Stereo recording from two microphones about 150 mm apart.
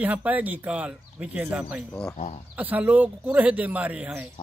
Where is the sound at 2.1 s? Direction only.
45° left (ahead or behind).